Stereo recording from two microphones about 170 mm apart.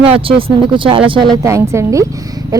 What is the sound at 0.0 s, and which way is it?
A woman's voice, 30° right (ahead or behind).